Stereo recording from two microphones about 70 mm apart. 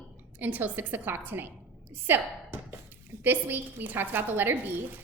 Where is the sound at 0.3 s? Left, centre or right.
Right.